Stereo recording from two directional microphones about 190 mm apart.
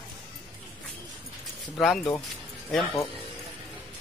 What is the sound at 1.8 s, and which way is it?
Speech, centre (ahead or behind).